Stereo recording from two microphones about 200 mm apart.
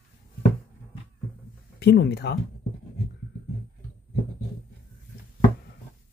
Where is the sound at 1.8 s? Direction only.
55° left (ahead or behind).